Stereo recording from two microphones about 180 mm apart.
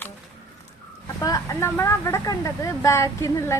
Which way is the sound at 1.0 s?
20° left (ahead or behind).